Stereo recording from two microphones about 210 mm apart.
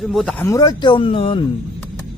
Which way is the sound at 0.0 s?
Centre (ahead or behind).